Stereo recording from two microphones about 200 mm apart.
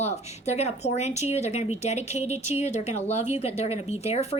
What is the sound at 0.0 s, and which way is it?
A woman's voice, 35° left (ahead or behind).